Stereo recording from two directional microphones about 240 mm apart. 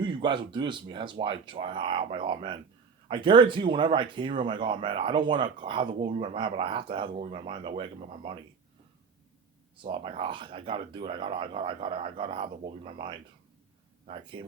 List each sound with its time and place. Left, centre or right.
0.0 s speech: centre
9.8 s speech: right